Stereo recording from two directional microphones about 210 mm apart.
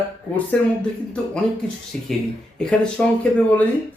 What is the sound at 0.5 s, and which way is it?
Speech, 5° left (ahead or behind).